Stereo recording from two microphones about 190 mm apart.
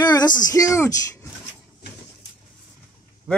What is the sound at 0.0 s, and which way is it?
Speech, 20° left (ahead or behind).